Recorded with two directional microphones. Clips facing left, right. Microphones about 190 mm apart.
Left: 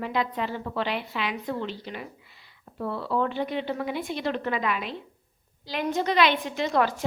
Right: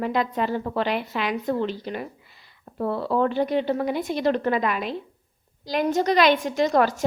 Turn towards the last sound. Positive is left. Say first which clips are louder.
# right 4 dB
turn(degrees=-45)  # may be behind; listen again after turning